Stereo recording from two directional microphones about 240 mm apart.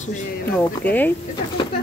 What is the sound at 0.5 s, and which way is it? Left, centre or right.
Speech, centre.